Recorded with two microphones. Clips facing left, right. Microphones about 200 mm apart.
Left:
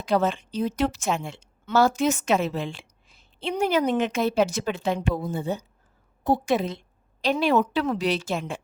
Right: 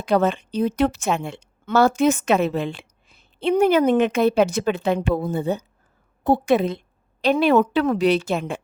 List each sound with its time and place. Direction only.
0.0 s a woman's voice: 60° right (ahead or behind)